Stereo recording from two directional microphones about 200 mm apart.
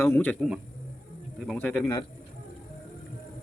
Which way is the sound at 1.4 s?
5° left (ahead or behind).